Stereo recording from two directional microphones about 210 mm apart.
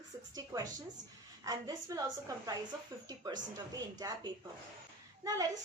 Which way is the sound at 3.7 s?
15° right (ahead or behind).